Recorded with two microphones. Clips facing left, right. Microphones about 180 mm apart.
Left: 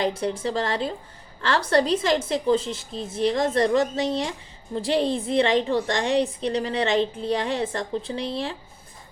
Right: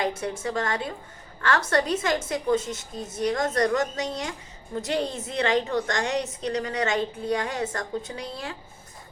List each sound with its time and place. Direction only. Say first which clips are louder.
0.0 s a woman's voice: left 3 dB; 30° left (ahead or behind)